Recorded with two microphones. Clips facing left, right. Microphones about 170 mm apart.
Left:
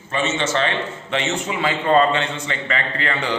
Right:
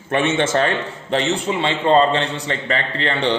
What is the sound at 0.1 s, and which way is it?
A man's voice, 60° right (ahead or behind).